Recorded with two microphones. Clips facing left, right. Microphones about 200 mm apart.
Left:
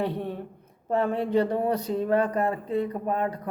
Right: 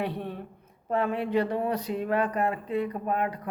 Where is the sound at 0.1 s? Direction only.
15° left (ahead or behind).